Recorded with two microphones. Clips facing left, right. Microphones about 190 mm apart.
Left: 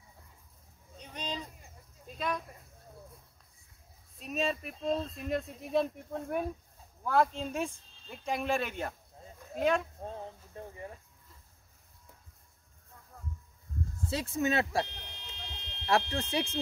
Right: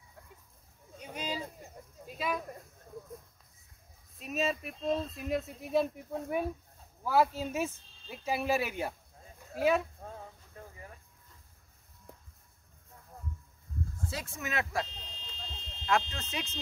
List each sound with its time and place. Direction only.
0.9 s a sound: 10° right (ahead or behind)
4.2 s speech: centre (ahead or behind)
10.0 s snake: 30° left (ahead or behind)
14.1 s speech: 30° left (ahead or behind)
14.9 s buzzer: 65° left (ahead or behind)